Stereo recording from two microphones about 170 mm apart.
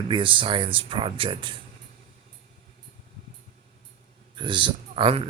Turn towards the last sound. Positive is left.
turn(degrees=-30)  # may be behind; listen again after turning